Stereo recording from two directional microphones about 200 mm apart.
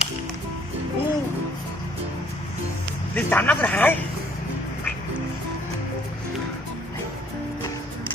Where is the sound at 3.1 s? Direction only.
10° left (ahead or behind).